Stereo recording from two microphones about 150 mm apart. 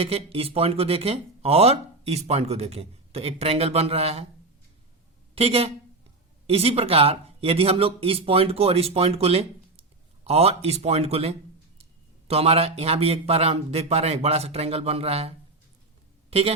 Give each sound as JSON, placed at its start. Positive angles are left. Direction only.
{"t": 0.0, "sound": "speech", "side_deg": -40}
{"t": 5.3, "sound": "a man's voice", "side_deg": -40}